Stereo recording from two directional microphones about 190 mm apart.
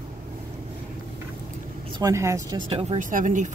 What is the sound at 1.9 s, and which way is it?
Speech, 15° right (ahead or behind).